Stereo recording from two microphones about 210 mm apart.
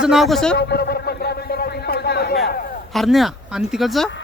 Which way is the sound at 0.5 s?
50° left (ahead or behind).